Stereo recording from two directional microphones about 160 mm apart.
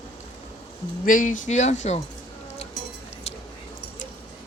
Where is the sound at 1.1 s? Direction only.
55° left (ahead or behind).